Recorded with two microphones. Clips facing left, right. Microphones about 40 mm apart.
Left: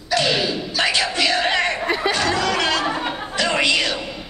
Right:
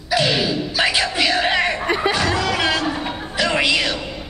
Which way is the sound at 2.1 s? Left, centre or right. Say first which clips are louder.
Even; centre.